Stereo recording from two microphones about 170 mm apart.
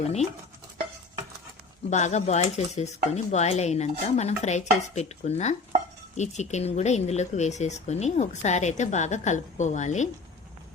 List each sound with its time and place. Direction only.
1.9 s cutlery: 45° left (ahead or behind)
6.1 s speech: 45° left (ahead or behind)